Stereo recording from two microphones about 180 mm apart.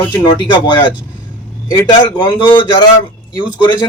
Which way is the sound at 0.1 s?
25° left (ahead or behind).